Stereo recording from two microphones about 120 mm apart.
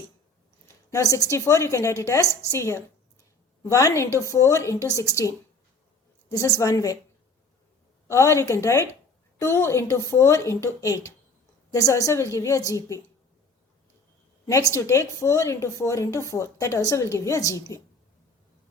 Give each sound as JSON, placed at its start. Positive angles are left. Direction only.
{"t": 0.9, "sound": "speech", "side_deg": 25}
{"t": 8.0, "sound": "speech", "side_deg": 25}
{"t": 14.4, "sound": "a woman's voice", "side_deg": 25}